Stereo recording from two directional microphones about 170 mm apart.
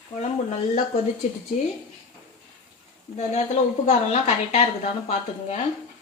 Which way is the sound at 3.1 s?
40° left (ahead or behind).